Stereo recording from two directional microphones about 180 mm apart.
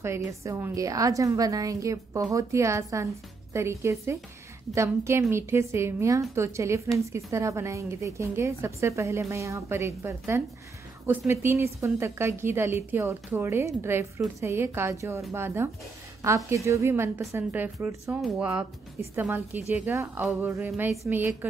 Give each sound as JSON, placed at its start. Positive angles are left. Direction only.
{"t": 0.0, "sound": "a woman's voice", "side_deg": -15}